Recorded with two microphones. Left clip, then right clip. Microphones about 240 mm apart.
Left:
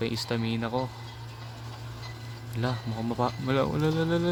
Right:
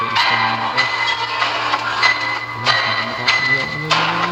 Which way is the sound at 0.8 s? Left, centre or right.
Right.